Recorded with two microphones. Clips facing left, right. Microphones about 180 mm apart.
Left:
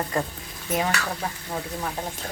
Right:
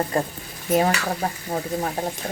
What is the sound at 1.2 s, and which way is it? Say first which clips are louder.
Speech: right 5 dB; 40° right (ahead or behind).